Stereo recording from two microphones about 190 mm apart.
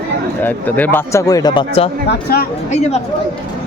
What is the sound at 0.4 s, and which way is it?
Speech, 10° left (ahead or behind).